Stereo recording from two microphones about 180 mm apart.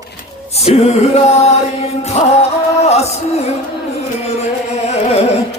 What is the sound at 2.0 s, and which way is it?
Music, 35° left (ahead or behind).